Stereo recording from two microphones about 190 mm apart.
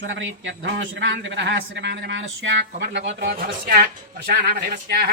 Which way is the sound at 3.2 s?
50° right (ahead or behind).